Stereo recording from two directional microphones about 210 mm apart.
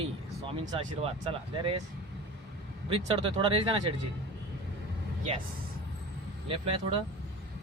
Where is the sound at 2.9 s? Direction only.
25° right (ahead or behind).